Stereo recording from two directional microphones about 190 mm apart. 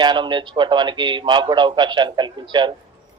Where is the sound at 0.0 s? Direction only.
25° right (ahead or behind).